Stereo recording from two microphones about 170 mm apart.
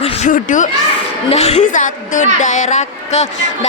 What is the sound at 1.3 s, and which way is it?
A woman's voice, 40° left (ahead or behind).